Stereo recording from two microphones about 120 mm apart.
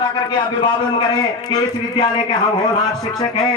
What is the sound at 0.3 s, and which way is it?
A man's voice, 40° left (ahead or behind).